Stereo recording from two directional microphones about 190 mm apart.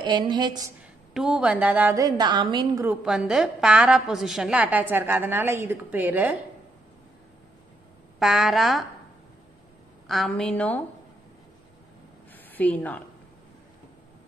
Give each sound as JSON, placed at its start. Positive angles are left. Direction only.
{"t": 0.0, "sound": "a woman's voice", "side_deg": -25}
{"t": 1.1, "sound": "a woman's voice", "side_deg": -5}
{"t": 2.8, "sound": "a woman's voice", "side_deg": -5}
{"t": 8.2, "sound": "a woman's voice", "side_deg": 0}
{"t": 10.0, "sound": "a woman's voice", "side_deg": 0}
{"t": 12.5, "sound": "a woman's voice", "side_deg": 10}